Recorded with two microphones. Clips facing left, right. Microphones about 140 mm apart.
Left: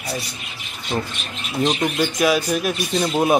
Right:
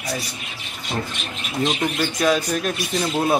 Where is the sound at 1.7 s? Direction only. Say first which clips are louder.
Left 3 dB; 10° left (ahead or behind).